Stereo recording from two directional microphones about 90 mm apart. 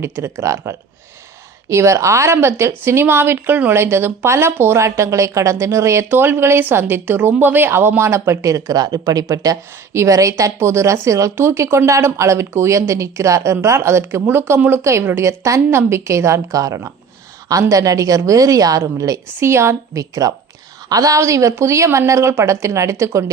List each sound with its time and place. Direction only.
0.0 s speech: 35° right (ahead or behind)
19.4 s speech: 30° right (ahead or behind)